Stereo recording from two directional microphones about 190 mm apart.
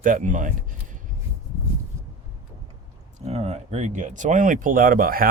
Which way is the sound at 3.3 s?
35° right (ahead or behind).